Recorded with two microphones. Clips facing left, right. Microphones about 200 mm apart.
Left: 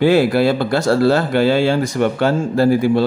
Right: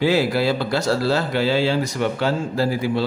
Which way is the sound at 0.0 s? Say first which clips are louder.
Left 6 dB; 55° left (ahead or behind).